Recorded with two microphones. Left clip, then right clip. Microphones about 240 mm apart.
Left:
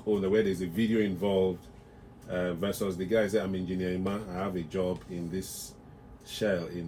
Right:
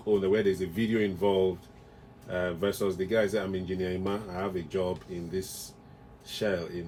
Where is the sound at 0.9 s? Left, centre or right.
Right.